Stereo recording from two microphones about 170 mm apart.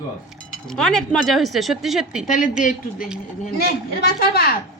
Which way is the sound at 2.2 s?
50° left (ahead or behind).